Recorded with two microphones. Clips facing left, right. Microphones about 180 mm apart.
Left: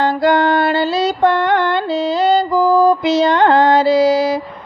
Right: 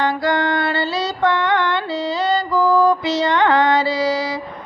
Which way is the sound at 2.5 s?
45° left (ahead or behind).